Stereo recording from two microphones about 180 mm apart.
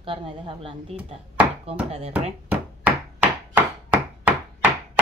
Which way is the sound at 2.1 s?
10° right (ahead or behind).